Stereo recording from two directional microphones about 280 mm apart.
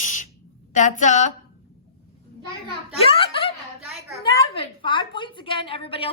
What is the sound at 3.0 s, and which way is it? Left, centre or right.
Snicker, centre.